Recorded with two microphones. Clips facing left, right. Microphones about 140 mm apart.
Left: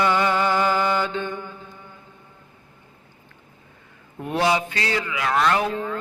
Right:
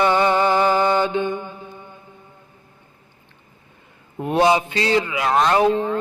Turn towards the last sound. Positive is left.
turn(degrees=-25)  # may be behind; listen again after turning